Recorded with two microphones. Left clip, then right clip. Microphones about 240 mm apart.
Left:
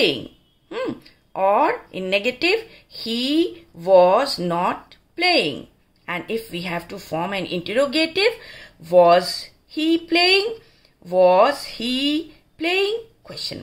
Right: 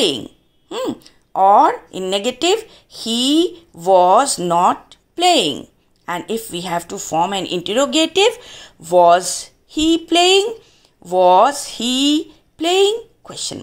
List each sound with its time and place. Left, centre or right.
0.7 s a woman's voice: centre